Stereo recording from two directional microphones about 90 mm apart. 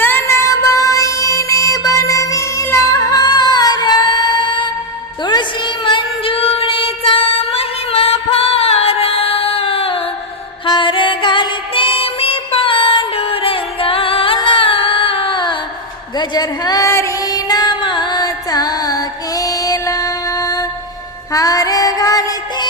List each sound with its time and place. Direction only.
0.0 s music: 25° left (ahead or behind); by 4.7 s 60° left (ahead or behind)
5.2 s child singing: 60° left (ahead or behind); by 10.0 s 90° left
10.7 s music: 65° left (ahead or behind); by 14.3 s 90° left
14.3 s a sound: 65° left (ahead or behind)
16.1 s a sound: 50° left (ahead or behind)
16.9 s music: 35° left (ahead or behind)